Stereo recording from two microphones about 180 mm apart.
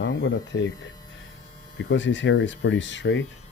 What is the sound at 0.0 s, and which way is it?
Speech, 90° left.